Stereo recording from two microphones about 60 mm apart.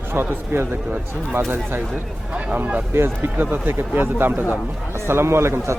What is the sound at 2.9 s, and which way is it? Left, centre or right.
Speech, right.